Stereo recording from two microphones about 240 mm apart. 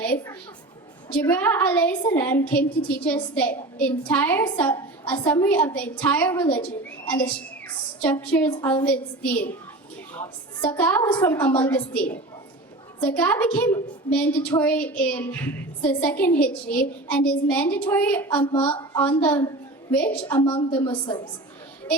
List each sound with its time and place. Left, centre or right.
0.0 s a woman's voice: centre